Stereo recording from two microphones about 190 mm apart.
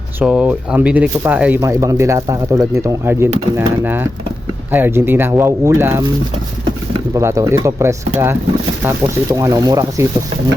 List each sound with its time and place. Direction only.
0.2 s speech: 10° right (ahead or behind)
4.7 s speech: 10° right (ahead or behind)
7.1 s speech: 15° right (ahead or behind)
9.3 s speech: 20° right (ahead or behind)